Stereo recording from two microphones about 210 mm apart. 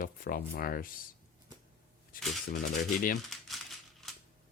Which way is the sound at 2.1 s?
40° left (ahead or behind).